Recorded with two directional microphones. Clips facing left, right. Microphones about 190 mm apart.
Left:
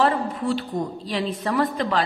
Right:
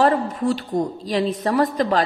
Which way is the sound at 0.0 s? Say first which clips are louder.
Right 3 dB; 45° right (ahead or behind).